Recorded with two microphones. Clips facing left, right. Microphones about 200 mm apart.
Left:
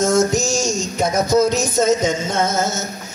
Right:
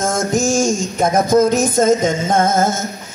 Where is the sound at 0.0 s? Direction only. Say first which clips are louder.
Left 1 dB; 50° right (ahead or behind).